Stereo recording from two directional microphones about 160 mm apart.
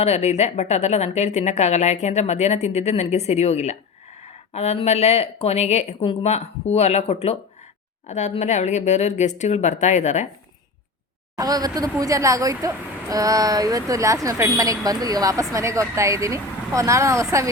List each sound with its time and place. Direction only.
0.0 s a woman's voice: 40° left (ahead or behind)
11.3 s speech: 25° right (ahead or behind)